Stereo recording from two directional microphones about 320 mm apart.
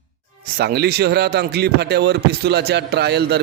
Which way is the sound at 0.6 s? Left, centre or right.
Right.